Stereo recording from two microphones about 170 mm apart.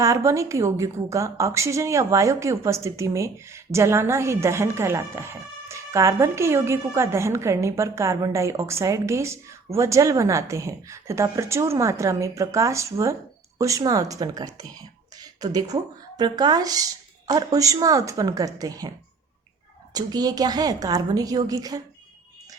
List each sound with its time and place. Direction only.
0.0 s a woman's voice: 20° right (ahead or behind)
19.9 s a woman's voice: 25° right (ahead or behind)